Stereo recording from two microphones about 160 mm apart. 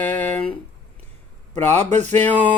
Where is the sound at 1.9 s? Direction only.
45° right (ahead or behind).